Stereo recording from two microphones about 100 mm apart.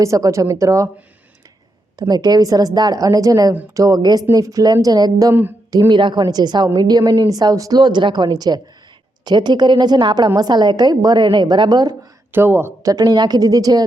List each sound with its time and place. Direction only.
0.0 s a woman's voice: 30° right (ahead or behind)
2.0 s a woman's voice: 40° right (ahead or behind)
5.3 s speech: 20° right (ahead or behind)
5.9 s a woman's voice: 50° right (ahead or behind)
12.3 s speech: 20° right (ahead or behind)
12.9 s a woman's voice: 40° right (ahead or behind)